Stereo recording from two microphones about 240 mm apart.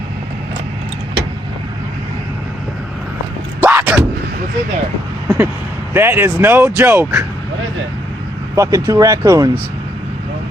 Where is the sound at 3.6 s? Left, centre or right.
Centre.